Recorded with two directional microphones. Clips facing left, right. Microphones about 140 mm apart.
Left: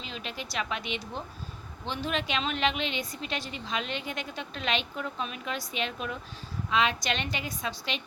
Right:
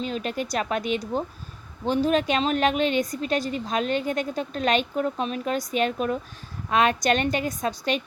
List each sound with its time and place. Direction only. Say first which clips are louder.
0.0 s a woman's voice: right 11 dB; 45° right (ahead or behind)